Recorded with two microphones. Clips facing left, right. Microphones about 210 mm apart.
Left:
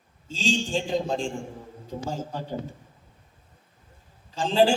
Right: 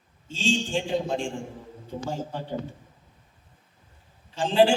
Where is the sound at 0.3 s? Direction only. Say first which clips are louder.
Even; 40° left (ahead or behind).